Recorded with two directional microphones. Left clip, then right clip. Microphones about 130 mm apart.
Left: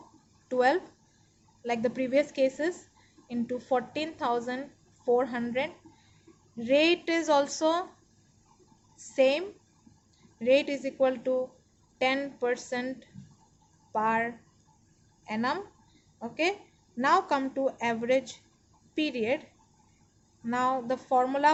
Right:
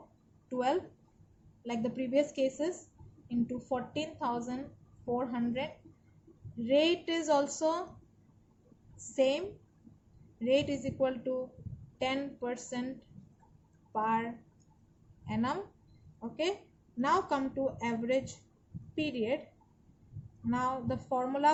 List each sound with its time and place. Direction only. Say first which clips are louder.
0.4 s a woman's voice: left 7 dB; 45° left (ahead or behind)
6.7 s a woman's voice: left 4 dB; 50° left (ahead or behind)
9.0 s a woman's voice: left 5 dB; 40° left (ahead or behind)
13.9 s a woman's voice: left 4 dB; 45° left (ahead or behind)
15.3 s a woman's voice: left 4 dB; 40° left (ahead or behind)
17.0 s a woman's voice: left 5 dB; 50° left (ahead or behind)
20.5 s a woman's voice: left 5 dB; 50° left (ahead or behind)